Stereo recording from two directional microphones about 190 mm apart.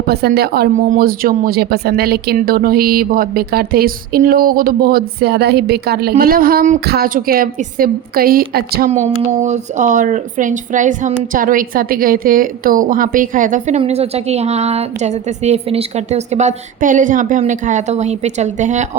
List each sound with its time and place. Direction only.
0.1 s speech: 55° right (ahead or behind)
8.9 s speech: 40° right (ahead or behind)